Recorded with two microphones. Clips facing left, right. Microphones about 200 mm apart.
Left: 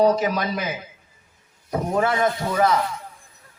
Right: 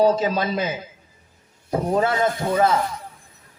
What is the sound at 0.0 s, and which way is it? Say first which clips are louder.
A man's voice: even; 25° right (ahead or behind).